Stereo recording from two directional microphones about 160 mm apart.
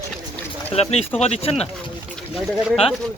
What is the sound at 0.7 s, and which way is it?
Speech, 40° left (ahead or behind).